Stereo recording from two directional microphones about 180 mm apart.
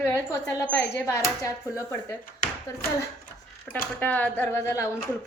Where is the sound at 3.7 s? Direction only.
10° left (ahead or behind).